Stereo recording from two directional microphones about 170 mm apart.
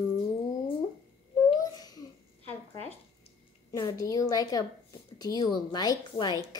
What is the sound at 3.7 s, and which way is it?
A woman's voice, 20° left (ahead or behind).